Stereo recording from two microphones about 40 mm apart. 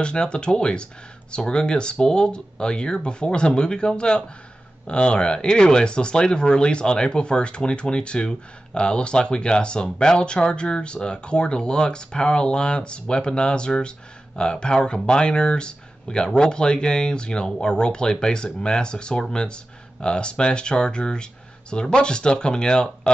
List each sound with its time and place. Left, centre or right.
0.0 s speech: left